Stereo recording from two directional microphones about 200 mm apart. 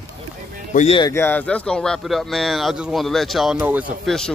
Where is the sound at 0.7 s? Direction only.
30° left (ahead or behind).